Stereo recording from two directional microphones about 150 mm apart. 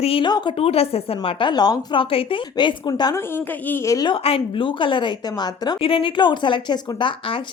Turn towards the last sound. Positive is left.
turn(degrees=35)  # may be behind; listen again after turning